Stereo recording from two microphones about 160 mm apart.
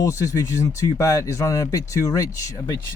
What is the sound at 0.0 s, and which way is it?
Speech, 20° left (ahead or behind).